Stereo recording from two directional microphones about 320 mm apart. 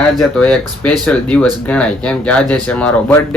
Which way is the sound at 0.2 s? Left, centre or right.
Centre.